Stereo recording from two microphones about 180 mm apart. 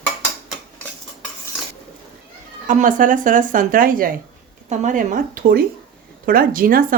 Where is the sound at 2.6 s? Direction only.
45° right (ahead or behind).